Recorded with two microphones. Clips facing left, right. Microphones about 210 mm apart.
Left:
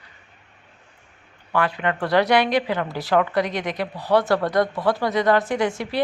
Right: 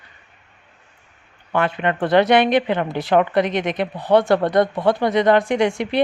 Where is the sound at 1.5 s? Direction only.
25° right (ahead or behind).